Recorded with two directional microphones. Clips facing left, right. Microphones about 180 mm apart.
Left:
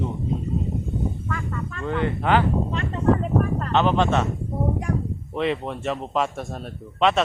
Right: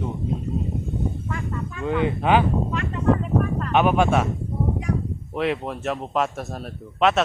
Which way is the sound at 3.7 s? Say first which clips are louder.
Right 2 dB; 10° right (ahead or behind).